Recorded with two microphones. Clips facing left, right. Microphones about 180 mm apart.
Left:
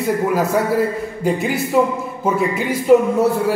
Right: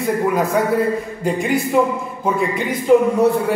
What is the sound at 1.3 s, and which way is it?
Speech, 5° left (ahead or behind).